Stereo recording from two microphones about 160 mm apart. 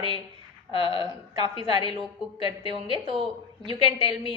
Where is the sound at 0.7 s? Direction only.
35° left (ahead or behind).